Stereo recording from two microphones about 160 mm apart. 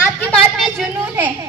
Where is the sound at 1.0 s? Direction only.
10° right (ahead or behind).